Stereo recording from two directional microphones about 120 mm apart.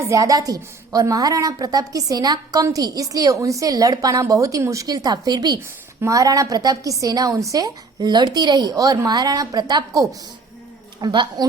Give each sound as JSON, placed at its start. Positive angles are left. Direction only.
{"t": 0.1, "sound": "a woman's voice", "side_deg": -30}
{"t": 11.0, "sound": "a woman's voice", "side_deg": -35}